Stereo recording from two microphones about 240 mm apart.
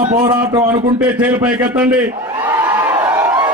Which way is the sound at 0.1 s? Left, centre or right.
Centre.